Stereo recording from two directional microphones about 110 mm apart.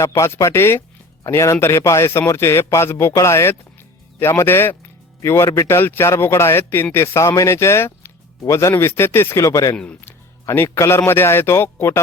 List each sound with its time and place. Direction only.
0.0 s speech: 25° left (ahead or behind)
9.7 s speech: 10° left (ahead or behind)
10.0 s a man's voice: 20° left (ahead or behind)